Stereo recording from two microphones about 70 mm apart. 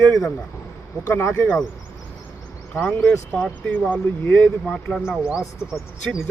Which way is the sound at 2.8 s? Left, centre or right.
Centre.